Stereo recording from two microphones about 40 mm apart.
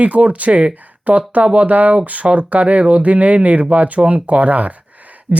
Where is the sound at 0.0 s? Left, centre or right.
Right.